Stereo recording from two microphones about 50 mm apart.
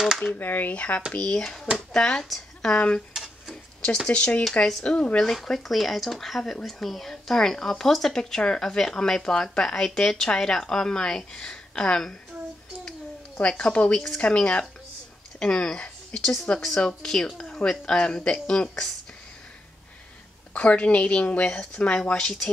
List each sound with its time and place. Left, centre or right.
0.4 s speech: left
1.1 s speech: centre
2.2 s a woman's voice: centre
2.7 s speech: centre
3.1 s tick-tock: centre
4.1 s speech: left
13.4 s speech: centre
13.9 s speech: centre
20.5 s speech: left
22.2 s speech: centre